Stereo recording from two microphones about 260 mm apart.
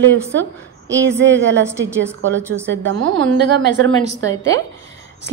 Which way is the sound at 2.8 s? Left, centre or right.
Right.